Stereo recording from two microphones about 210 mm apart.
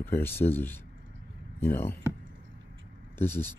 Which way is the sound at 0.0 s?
10° left (ahead or behind).